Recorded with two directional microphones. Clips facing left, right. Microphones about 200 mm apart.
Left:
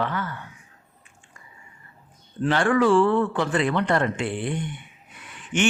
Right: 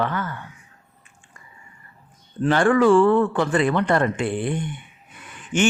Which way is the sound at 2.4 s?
50° right (ahead or behind).